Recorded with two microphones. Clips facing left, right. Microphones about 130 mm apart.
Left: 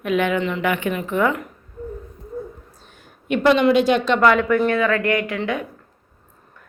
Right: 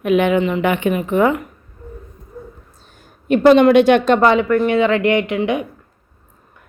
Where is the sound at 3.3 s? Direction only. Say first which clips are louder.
Right 6 dB; 45° right (ahead or behind).